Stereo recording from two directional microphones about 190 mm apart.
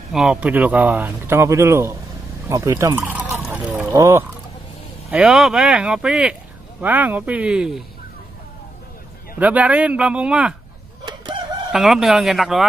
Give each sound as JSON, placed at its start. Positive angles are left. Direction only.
{"t": 0.1, "sound": "speech", "side_deg": -5}
{"t": 2.4, "sound": "a sound", "side_deg": -15}
{"t": 3.9, "sound": "speech", "side_deg": -15}
{"t": 5.1, "sound": "speech", "side_deg": -5}
{"t": 9.4, "sound": "speech", "side_deg": -10}
{"t": 11.1, "sound": "crowing", "side_deg": -25}
{"t": 11.7, "sound": "speech", "side_deg": 0}